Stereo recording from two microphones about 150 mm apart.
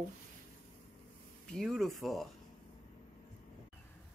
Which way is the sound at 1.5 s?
5° left (ahead or behind).